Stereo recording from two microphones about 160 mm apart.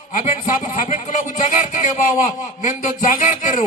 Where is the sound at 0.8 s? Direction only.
50° left (ahead or behind).